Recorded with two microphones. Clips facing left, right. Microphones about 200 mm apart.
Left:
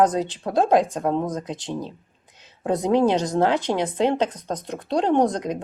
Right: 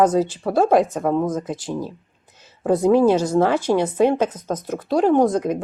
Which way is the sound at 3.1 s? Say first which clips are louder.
Right 3 dB; 15° left (ahead or behind).